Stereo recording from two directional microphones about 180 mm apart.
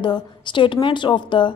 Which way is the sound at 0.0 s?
25° left (ahead or behind).